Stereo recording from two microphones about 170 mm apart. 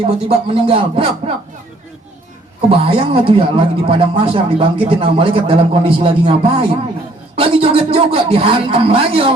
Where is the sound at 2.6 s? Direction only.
35° right (ahead or behind).